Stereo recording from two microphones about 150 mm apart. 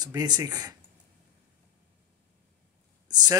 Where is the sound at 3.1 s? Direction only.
25° right (ahead or behind).